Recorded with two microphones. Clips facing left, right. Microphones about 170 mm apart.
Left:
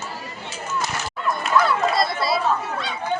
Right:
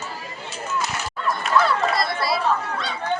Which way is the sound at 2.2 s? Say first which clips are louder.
Left 1 dB; 25° left (ahead or behind).